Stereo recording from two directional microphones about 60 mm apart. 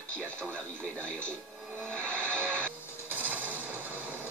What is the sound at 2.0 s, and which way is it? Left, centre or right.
Music, centre.